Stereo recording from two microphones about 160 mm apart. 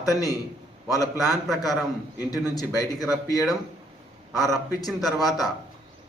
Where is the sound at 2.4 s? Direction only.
20° left (ahead or behind).